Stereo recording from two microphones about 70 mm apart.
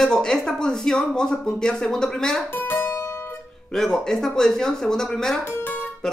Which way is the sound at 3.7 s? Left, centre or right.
Centre.